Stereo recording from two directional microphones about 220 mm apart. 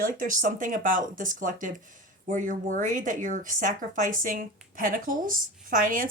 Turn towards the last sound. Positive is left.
turn(degrees=-40)  # may be behind; listen again after turning